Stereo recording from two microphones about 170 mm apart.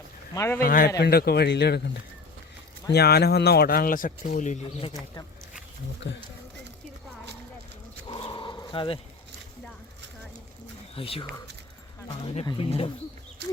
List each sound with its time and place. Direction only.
0.3 s a man's voice: 15° left (ahead or behind)
0.6 s speech: 55° left (ahead or behind)
0.9 s speech: 70° left (ahead or behind)
2.9 s speech: 70° left (ahead or behind); by 4.6 s 45° left (ahead or behind)
8.1 s dog: 30° left (ahead or behind)
10.9 s speech: 35° left (ahead or behind)